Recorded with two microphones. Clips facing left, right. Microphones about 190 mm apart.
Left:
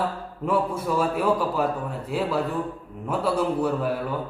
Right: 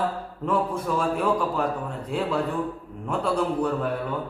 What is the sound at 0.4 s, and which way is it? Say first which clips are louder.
A man's voice: left 1 dB; 5° left (ahead or behind).